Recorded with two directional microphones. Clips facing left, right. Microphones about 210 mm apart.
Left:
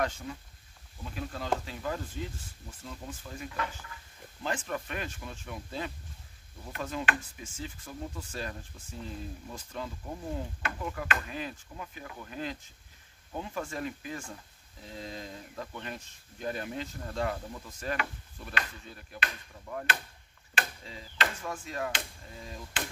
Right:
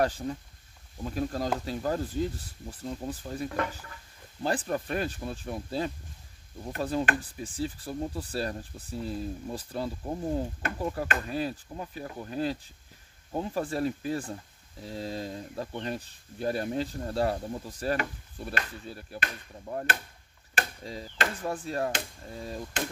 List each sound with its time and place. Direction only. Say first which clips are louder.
0.0 s speech: right 5 dB; 35° right (ahead or behind)